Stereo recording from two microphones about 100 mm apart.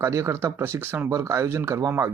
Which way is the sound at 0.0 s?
30° right (ahead or behind).